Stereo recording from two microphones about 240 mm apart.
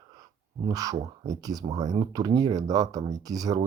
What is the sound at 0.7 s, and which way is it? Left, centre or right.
Speech, centre.